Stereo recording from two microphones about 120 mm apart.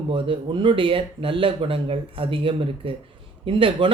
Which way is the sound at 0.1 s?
45° right (ahead or behind).